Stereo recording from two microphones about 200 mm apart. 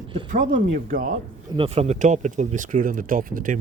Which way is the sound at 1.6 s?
30° right (ahead or behind).